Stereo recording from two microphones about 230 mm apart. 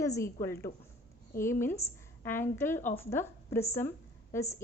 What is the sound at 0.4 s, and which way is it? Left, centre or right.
A woman's voice, centre.